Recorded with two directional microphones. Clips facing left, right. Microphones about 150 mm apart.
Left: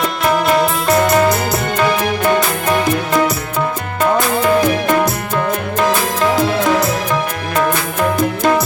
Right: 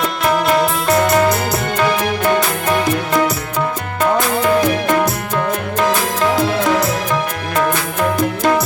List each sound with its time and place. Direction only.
0.0 s music: 10° left (ahead or behind)